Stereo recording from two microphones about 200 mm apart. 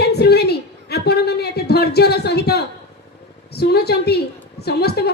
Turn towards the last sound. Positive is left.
turn(degrees=55)  # may be behind; listen again after turning